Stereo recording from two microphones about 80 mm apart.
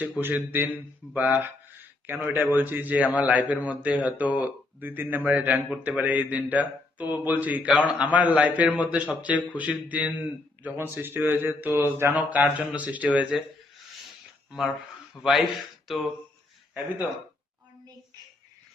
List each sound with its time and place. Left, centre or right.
0.2 s a man's voice: right
12.1 s a man's voice: centre
15.1 s speech: centre